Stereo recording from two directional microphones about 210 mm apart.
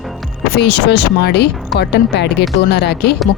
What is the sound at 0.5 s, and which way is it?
Speech, 50° left (ahead or behind).